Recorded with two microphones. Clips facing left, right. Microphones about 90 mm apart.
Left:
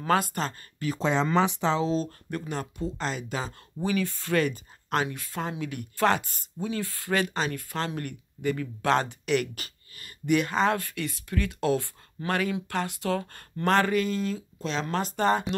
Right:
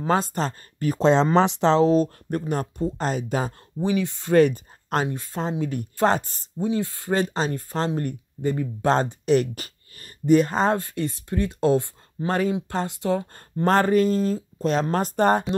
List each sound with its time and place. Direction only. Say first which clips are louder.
0.0 s speech: right 2 dB; 25° right (ahead or behind)
0.4 s speech: right 5 dB; 40° right (ahead or behind)
0.9 s speech: right 7 dB; 70° right (ahead or behind)
2.3 s speech: right 6 dB; 45° right (ahead or behind)
3.8 s speech: right 4 dB; 25° right (ahead or behind)
4.4 s speech: right 11 dB; 45° right (ahead or behind)
6.7 s speech: right 4 dB; 25° right (ahead or behind)
13.7 s speech: right 5 dB; 40° right (ahead or behind)